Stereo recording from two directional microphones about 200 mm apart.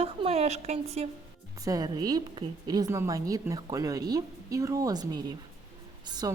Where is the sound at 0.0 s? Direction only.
30° right (ahead or behind).